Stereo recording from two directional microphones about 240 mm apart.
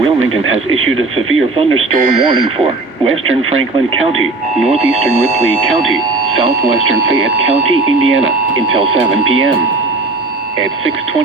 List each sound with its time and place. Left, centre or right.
0.2 s speech: right
4.7 s speech: right
7.7 s speech: right
9.2 s speech: right